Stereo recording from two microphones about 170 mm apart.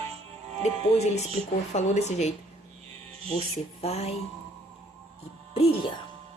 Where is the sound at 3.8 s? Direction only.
40° left (ahead or behind).